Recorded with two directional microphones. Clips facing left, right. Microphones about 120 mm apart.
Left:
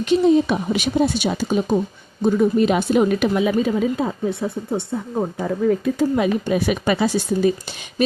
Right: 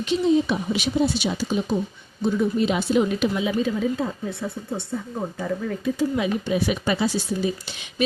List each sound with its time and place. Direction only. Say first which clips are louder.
0.0 s a woman's voice: left 5 dB; 55° left (ahead or behind)